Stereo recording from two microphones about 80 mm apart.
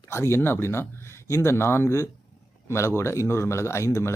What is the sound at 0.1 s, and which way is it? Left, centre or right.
A man's voice, left.